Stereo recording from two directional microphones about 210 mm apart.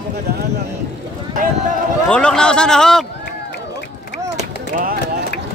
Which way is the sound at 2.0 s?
5° left (ahead or behind).